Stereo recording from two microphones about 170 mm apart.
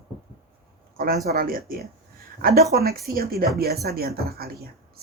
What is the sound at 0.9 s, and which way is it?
Speech, 60° right (ahead or behind).